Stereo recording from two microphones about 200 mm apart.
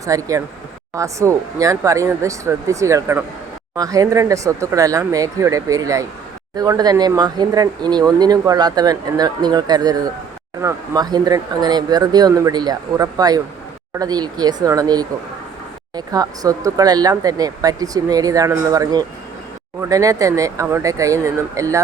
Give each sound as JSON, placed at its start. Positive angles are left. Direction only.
{"t": 0.0, "sound": "speech", "side_deg": -15}